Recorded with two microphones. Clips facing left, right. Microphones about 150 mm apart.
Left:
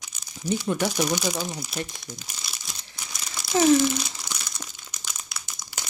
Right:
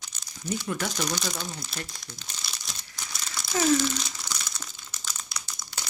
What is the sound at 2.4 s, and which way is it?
Crumpling, 5° left (ahead or behind).